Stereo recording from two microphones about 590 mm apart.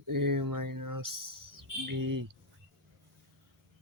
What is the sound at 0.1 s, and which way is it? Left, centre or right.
Bird, right.